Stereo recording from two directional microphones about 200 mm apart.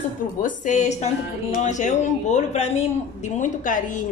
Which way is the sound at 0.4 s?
40° left (ahead or behind).